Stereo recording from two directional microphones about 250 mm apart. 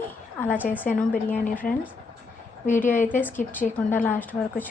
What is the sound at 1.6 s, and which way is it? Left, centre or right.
A woman's voice, centre.